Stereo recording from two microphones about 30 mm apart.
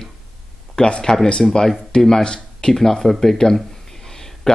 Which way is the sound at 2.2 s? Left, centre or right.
Left.